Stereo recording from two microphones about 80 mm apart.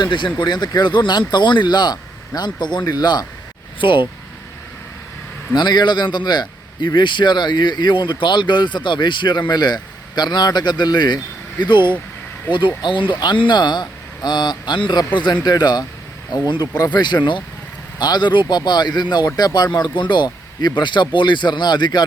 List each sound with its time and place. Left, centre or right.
0.0 s speech: left
0.3 s a man's voice: left
3.8 s speech: left
5.5 s a man's voice: left
9.5 s speech: left
11.6 s a man's voice: left
12.5 s speech: left
20.0 s a man's voice: left